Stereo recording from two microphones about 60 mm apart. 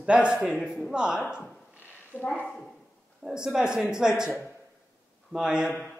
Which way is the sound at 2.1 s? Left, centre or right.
Left.